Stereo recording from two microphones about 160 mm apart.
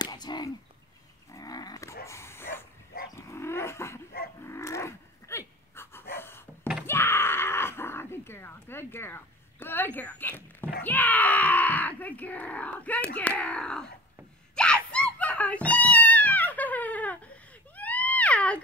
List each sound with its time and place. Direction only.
0.0 s a sound: 25° left (ahead or behind)
1.3 s livestock: 25° left (ahead or behind)
2.0 s dog: 15° left (ahead or behind)
4.5 s livestock: 20° left (ahead or behind)
6.1 s a sound: 15° left (ahead or behind)
10.8 s speech: 10° left (ahead or behind)
14.5 s gasp: 5° left (ahead or behind)
14.9 s goat: 5° left (ahead or behind)
17.7 s a sound: 10° left (ahead or behind)